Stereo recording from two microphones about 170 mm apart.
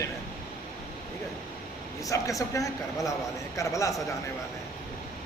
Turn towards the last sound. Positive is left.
turn(degrees=20)  # may be behind; listen again after turning